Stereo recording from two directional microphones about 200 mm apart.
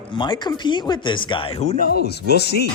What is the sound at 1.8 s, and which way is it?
Speech, 55° left (ahead or behind).